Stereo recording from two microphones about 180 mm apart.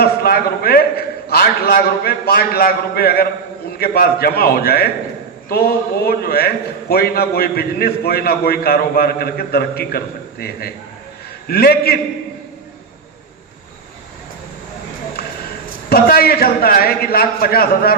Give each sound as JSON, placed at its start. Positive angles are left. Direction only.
{"t": 0.0, "sound": "a man's voice", "side_deg": 55}
{"t": 6.1, "sound": "a man's voice", "side_deg": 55}
{"t": 11.4, "sound": "a man's voice", "side_deg": 60}
{"t": 15.9, "sound": "a man's voice", "side_deg": 55}